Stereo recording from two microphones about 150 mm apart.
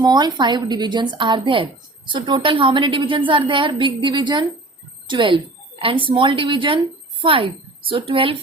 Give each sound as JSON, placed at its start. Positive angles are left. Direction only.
{"t": 0.0, "sound": "a woman's voice", "side_deg": -30}